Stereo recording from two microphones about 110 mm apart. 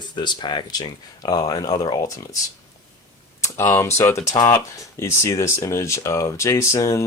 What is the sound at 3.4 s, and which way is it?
Speech, 25° left (ahead or behind).